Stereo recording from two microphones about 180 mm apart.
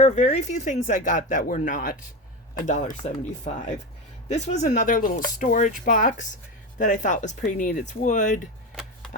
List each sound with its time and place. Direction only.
0.0 s speech: 40° left (ahead or behind)
3.0 s speech: 40° left (ahead or behind)